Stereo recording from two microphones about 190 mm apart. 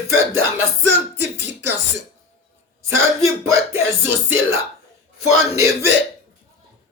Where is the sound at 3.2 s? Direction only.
15° right (ahead or behind).